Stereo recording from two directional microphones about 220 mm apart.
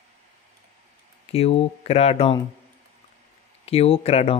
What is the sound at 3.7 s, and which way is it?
Speech, 25° left (ahead or behind).